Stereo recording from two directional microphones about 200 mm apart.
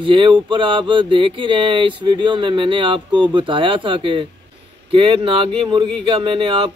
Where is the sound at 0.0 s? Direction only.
25° right (ahead or behind).